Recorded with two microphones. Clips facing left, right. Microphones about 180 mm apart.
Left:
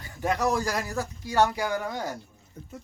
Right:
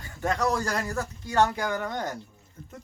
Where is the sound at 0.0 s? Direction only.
10° left (ahead or behind).